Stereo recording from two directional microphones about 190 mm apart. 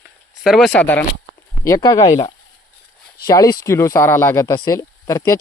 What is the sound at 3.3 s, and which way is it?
Speech, 20° left (ahead or behind).